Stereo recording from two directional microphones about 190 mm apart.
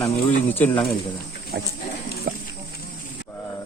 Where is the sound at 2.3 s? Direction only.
50° right (ahead or behind).